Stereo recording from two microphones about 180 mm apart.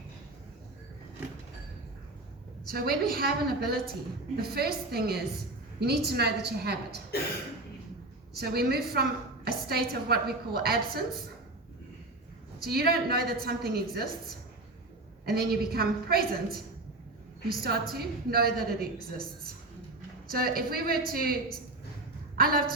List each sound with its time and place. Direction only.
2.6 s a woman's voice: 55° right (ahead or behind)
8.4 s a woman's voice: 60° right (ahead or behind)
12.6 s a woman's voice: 60° right (ahead or behind)
20.3 s a woman's voice: 55° right (ahead or behind)